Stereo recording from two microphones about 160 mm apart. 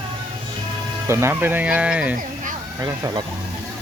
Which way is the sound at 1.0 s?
15° right (ahead or behind).